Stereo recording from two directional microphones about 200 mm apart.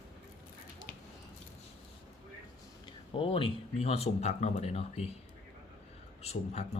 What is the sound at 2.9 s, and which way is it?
Speech, 25° left (ahead or behind).